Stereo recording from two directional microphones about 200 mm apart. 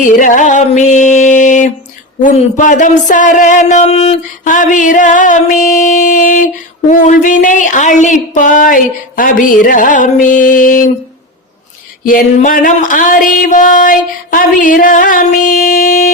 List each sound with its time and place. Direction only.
0.2 s speech: 40° left (ahead or behind)
12.0 s speech: 40° left (ahead or behind)